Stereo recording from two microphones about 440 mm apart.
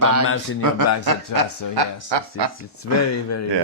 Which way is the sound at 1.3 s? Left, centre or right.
Right.